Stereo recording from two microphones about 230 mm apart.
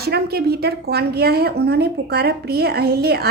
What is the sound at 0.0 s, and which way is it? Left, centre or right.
Speech, right.